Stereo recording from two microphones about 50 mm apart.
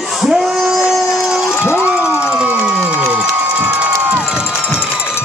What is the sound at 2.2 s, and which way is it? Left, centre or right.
Music, right.